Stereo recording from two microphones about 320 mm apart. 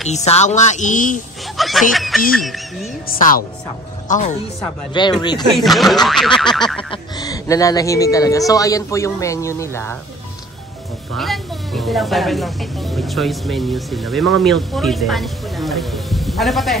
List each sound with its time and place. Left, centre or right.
0.1 s a woman's voice: left
1.6 s snicker: centre
2.3 s speech: centre
3.1 s a woman's voice: left
5.5 s speech: centre
6.8 s speech: centre
11.1 s speech: centre